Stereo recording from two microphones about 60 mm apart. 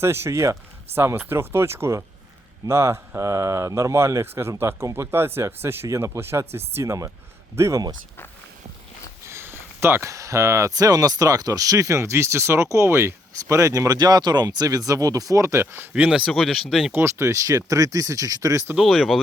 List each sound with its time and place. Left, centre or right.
0.0 s speech: right
0.9 s speech: right
3.2 s speech: right
9.2 s a sound: right
10.1 s speech: right
10.7 s speech: right
15.5 s speech: right
15.9 s speech: centre
16.2 s speech: centre
16.9 s speech: right
17.4 s speech: right
18.8 s speech: centre